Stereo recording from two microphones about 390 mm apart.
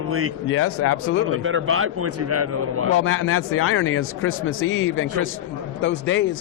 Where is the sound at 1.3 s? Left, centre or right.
Right.